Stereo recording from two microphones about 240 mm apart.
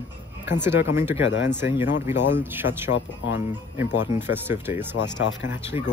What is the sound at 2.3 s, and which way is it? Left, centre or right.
Speech, centre.